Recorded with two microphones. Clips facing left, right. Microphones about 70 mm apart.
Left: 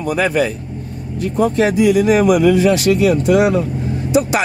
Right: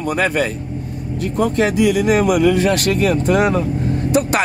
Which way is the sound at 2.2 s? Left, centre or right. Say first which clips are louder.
Left 2 dB; left.